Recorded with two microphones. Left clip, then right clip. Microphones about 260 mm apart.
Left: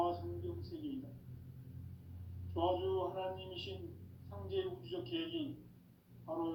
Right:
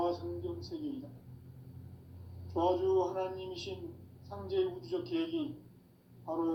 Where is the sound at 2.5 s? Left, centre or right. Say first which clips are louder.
Right 6 dB; right.